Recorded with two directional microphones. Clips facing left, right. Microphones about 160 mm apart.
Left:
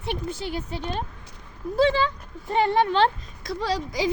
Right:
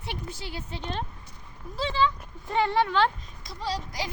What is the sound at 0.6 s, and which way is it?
Speech, 10° left (ahead or behind).